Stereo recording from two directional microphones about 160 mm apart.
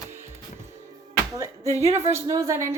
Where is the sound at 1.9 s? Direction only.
45° right (ahead or behind).